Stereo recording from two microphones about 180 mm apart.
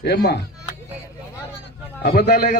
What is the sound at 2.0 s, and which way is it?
Speech, 60° left (ahead or behind).